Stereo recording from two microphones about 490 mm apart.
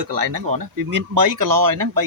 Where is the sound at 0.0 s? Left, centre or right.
Right.